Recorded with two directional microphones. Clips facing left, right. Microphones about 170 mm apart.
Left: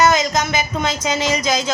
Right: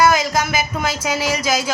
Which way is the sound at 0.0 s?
10° right (ahead or behind).